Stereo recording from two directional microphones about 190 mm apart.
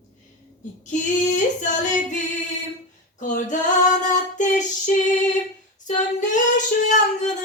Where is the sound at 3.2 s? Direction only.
40° left (ahead or behind).